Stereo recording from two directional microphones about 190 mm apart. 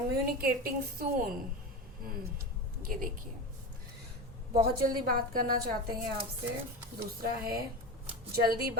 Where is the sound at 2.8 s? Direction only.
45° right (ahead or behind).